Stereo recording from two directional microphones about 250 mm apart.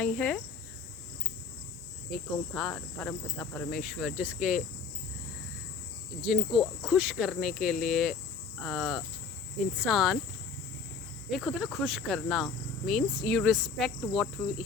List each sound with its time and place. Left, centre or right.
0.0 s cricket: centre
2.1 s cricket: centre
6.2 s cricket: centre
11.3 s cricket: centre